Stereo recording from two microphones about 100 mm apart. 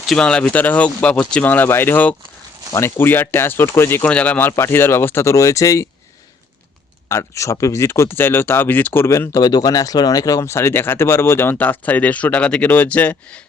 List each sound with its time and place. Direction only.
0.2 s speech: 10° left (ahead or behind); by 5.9 s 30° left (ahead or behind)
7.1 s speech: 30° left (ahead or behind); by 13.4 s 10° left (ahead or behind)